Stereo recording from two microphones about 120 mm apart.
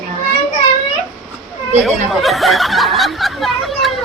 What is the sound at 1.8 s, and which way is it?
Speech, centre (ahead or behind).